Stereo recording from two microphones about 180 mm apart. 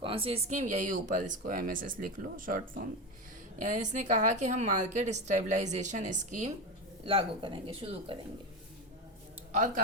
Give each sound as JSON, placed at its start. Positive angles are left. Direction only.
{"t": 0.0, "sound": "speech", "side_deg": -30}
{"t": 7.0, "sound": "speech", "side_deg": -30}
{"t": 9.5, "sound": "speech", "side_deg": -45}